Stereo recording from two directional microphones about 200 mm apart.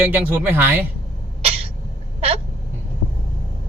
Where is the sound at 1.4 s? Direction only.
30° right (ahead or behind).